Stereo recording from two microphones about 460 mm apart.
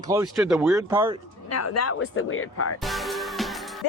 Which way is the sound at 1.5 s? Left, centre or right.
Left.